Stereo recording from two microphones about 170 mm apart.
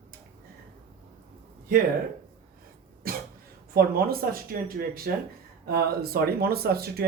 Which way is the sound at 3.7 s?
60° right (ahead or behind).